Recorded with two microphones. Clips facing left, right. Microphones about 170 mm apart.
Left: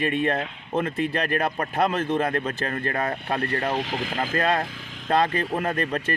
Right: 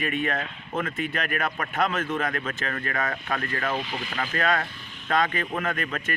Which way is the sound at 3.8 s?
90° left.